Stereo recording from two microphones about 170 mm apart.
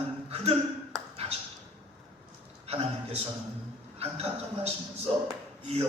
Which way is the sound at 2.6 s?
35° right (ahead or behind).